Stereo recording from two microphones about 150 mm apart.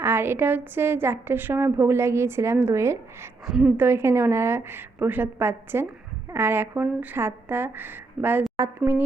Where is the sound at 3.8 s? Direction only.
15° right (ahead or behind).